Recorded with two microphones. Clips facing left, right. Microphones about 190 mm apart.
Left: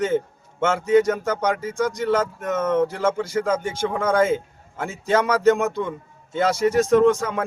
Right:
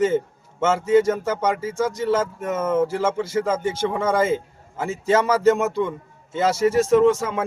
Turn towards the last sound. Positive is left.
turn(degrees=-5)  # may be behind; listen again after turning